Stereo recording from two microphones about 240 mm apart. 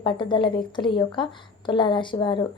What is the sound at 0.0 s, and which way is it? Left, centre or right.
Speech, centre.